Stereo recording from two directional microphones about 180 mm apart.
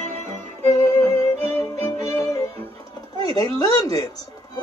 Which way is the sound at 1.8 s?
15° left (ahead or behind).